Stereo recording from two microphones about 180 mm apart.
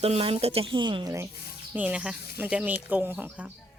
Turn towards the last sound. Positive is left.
turn(degrees=-10)  # may be behind; listen again after turning